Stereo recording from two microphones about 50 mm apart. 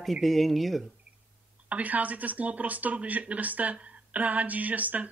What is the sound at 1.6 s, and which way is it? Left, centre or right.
Speech, right.